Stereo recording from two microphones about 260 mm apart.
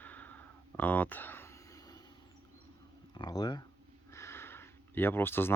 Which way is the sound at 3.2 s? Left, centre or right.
Centre.